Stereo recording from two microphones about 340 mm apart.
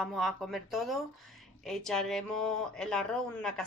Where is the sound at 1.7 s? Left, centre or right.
Centre.